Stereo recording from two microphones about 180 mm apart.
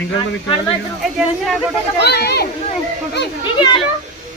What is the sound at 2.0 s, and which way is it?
Speech, 65° left (ahead or behind).